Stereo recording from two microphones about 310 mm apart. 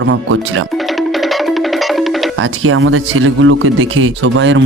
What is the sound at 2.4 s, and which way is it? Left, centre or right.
Speech, right.